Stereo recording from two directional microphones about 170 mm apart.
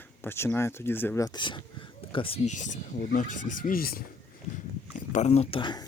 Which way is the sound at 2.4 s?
45° left (ahead or behind).